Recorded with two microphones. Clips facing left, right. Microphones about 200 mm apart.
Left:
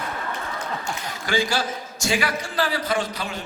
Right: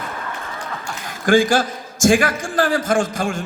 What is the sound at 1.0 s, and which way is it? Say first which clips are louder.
A man's voice: right 11 dB; 50° right (ahead or behind).